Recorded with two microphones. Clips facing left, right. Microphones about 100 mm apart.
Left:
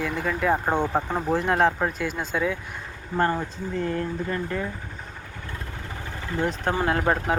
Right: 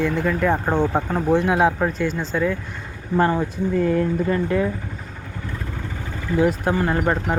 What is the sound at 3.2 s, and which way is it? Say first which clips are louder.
Speech: right 4 dB; 15° right (ahead or behind).